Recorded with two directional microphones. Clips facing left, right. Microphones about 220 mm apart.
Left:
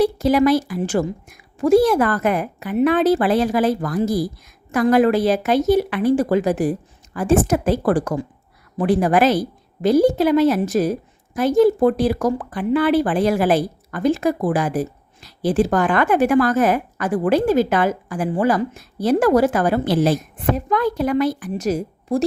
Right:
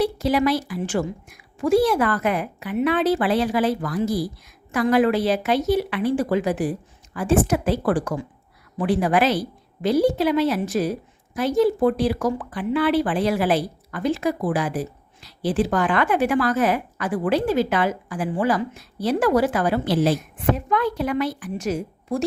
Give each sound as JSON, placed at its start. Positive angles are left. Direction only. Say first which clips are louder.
{"t": 0.0, "sound": "a woman's voice", "louder": "left 5 dB", "side_deg": 45}